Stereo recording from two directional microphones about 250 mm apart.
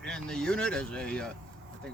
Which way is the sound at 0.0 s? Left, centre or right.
Centre.